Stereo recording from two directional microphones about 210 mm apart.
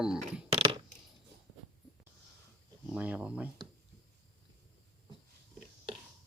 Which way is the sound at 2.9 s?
5° right (ahead or behind).